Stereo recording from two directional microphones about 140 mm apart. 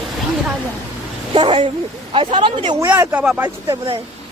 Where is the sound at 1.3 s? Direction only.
35° right (ahead or behind).